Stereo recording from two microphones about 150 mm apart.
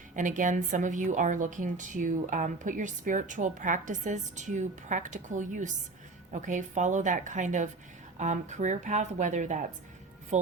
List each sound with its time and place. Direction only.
0.2 s a woman's voice: 60° right (ahead or behind)